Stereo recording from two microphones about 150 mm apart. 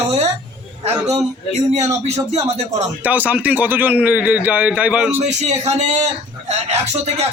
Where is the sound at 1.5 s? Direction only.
50° right (ahead or behind).